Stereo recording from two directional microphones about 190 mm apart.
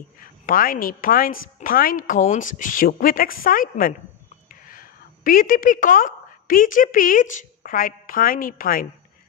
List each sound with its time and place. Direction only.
0.5 s a woman's voice: 45° left (ahead or behind)